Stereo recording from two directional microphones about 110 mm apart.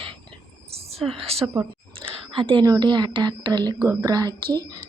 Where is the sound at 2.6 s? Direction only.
35° right (ahead or behind).